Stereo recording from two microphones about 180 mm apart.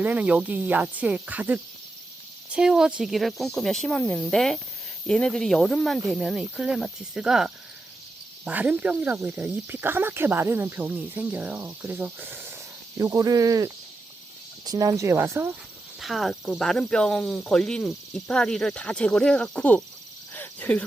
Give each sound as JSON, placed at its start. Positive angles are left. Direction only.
{"t": 0.0, "sound": "speech", "side_deg": -10}
{"t": 16.0, "sound": "speech", "side_deg": 0}